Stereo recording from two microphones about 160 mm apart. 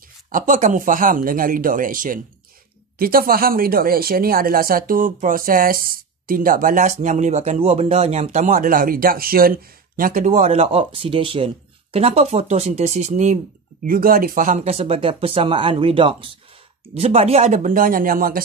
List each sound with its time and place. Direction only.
0.3 s speech: 55° right (ahead or behind)
13.8 s speech: 65° right (ahead or behind)